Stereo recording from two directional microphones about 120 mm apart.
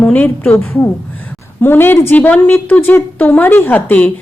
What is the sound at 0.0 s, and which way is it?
A woman's voice, 15° left (ahead or behind).